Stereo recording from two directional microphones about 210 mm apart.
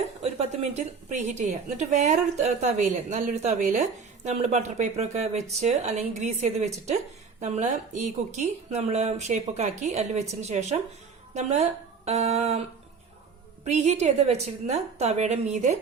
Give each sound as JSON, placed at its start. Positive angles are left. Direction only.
{"t": 0.2, "sound": "speech", "side_deg": -30}
{"t": 13.7, "sound": "speech", "side_deg": -30}